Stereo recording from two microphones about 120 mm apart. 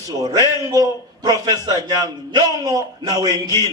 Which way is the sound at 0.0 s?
30° right (ahead or behind).